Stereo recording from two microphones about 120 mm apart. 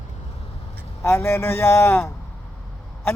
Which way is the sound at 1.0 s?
20° left (ahead or behind).